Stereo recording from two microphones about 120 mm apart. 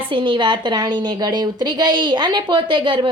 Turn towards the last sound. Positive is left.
turn(degrees=-40)  # may be behind; listen again after turning